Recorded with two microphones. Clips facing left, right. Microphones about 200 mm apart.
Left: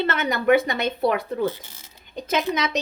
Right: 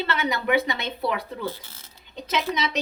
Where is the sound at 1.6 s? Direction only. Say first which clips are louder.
Left 2 dB; 15° left (ahead or behind).